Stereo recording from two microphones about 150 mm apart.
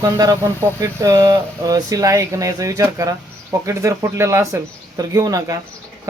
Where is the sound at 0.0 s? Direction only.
25° right (ahead or behind).